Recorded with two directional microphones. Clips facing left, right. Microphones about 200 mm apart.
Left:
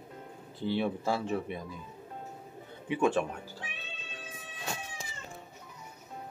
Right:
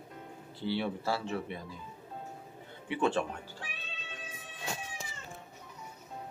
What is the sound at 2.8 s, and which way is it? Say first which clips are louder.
Speech: left 2 dB; 10° left (ahead or behind).